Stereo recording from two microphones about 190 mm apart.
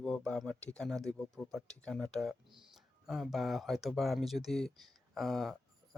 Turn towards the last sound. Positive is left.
turn(degrees=0)  # may be behind; listen again after turning